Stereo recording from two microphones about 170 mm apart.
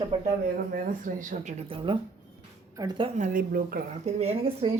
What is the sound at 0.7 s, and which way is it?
Speech, 50° right (ahead or behind).